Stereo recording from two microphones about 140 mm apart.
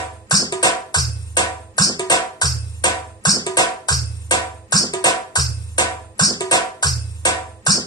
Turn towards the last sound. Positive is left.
turn(degrees=25)  # may be behind; listen again after turning